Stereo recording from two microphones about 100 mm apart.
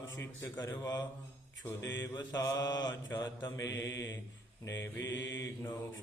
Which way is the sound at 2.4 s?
40° left (ahead or behind).